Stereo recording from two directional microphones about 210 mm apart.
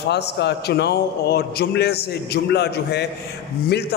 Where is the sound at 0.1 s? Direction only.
55° left (ahead or behind).